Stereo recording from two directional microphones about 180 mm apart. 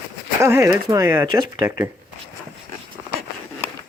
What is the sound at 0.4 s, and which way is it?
Speech, 15° right (ahead or behind).